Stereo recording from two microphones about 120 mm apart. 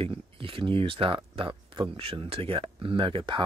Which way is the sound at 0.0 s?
45° right (ahead or behind).